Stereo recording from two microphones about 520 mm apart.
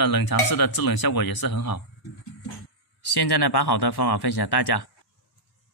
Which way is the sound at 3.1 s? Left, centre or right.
Left.